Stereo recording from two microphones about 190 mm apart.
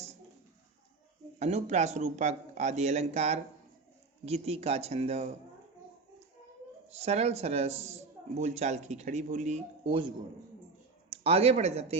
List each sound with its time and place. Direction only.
1.4 s a man's voice: 35° right (ahead or behind)
6.9 s a man's voice: 35° right (ahead or behind)
11.1 s speech: 30° right (ahead or behind)